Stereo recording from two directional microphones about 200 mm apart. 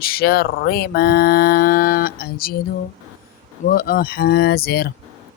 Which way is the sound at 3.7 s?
50° left (ahead or behind).